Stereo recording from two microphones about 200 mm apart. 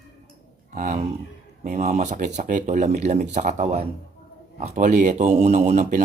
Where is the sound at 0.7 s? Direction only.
35° right (ahead or behind).